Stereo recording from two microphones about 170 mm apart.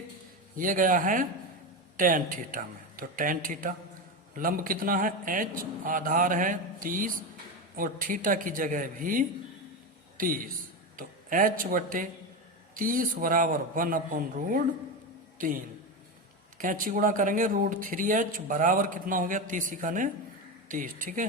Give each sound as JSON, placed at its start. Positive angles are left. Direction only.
{"t": 0.5, "sound": "a man's voice", "side_deg": -55}